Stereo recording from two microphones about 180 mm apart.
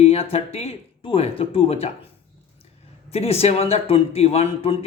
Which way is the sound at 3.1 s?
35° left (ahead or behind).